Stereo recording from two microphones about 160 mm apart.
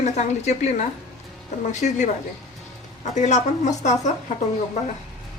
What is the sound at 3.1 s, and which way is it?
Speech, 50° left (ahead or behind).